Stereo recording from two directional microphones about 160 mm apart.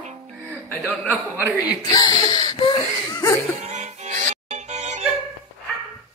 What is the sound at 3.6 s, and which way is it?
Music, 45° right (ahead or behind).